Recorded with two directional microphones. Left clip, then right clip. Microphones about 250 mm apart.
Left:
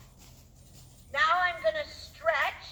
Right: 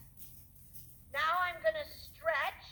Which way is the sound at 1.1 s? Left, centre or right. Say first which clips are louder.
Left 7 dB; right.